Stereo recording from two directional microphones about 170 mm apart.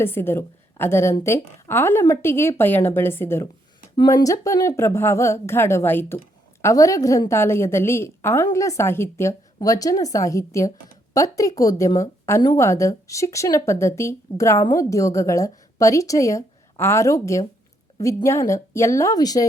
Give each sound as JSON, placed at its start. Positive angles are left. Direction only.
{"t": 0.0, "sound": "a woman's voice", "side_deg": 15}